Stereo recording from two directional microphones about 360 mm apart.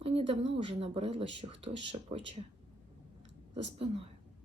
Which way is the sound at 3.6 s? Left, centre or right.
Centre.